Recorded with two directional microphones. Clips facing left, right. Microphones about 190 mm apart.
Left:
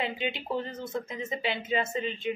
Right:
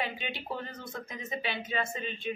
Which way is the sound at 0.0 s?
25° left (ahead or behind).